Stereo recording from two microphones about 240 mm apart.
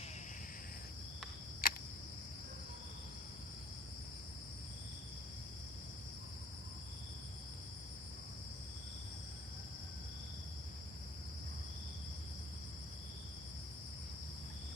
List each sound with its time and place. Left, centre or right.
1.6 s cricket: left